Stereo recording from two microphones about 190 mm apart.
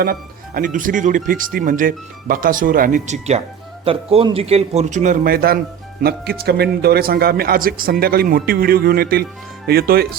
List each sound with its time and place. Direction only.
0.0 s speech: 50° right (ahead or behind)